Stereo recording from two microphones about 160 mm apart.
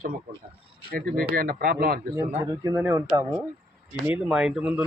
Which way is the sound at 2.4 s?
20° right (ahead or behind).